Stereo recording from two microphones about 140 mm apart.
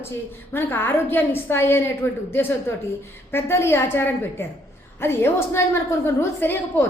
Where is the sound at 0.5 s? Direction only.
15° left (ahead or behind).